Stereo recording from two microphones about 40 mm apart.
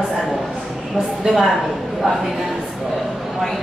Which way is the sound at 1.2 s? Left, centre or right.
Centre.